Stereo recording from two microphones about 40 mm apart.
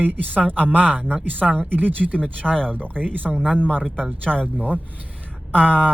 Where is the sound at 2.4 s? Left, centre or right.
Left.